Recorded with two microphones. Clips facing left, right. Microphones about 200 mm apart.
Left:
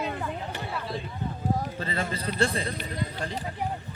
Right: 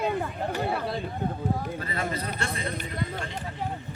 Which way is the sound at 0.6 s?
60° right (ahead or behind).